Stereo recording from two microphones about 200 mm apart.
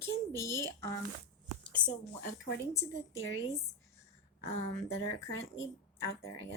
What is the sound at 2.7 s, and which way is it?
Speech, 15° left (ahead or behind).